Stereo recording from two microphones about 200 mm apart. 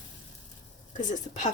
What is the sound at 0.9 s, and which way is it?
Speech, 35° left (ahead or behind).